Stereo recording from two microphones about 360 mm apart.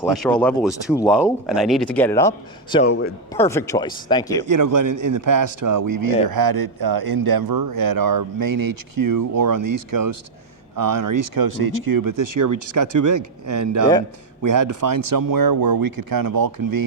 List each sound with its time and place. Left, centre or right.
0.1 s speech: centre
3.3 s speech: centre
4.4 s speech: right
6.2 s speech: right